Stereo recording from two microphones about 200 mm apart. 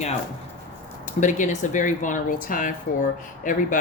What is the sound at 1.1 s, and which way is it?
Speech, 40° left (ahead or behind).